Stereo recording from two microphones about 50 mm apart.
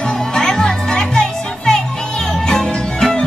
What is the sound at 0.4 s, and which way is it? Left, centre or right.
Music, centre.